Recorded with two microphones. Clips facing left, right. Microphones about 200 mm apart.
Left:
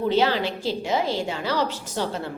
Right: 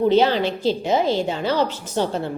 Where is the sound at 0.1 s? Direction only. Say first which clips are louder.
Right 4 dB; 20° right (ahead or behind).